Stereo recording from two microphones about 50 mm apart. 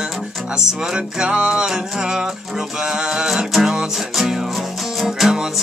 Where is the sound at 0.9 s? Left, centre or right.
Centre.